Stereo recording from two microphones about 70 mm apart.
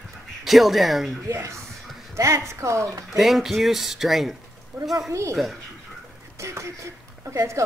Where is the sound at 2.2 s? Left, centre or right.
Right.